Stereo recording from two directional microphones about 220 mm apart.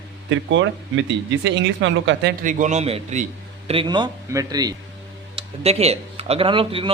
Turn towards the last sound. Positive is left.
turn(degrees=-25)  # may be behind; listen again after turning